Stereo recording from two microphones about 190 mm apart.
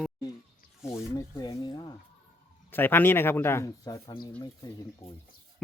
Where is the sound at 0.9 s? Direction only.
20° left (ahead or behind).